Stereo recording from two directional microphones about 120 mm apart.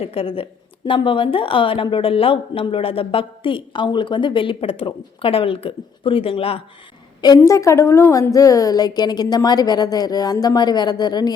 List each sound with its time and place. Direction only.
0.0 s a woman's voice: 50° left (ahead or behind)
7.2 s a woman's voice: 30° left (ahead or behind)